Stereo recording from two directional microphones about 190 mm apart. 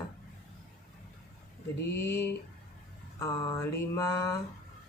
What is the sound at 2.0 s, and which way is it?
Speech, 15° left (ahead or behind).